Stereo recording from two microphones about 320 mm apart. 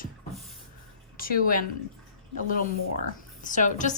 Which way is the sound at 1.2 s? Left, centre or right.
Left.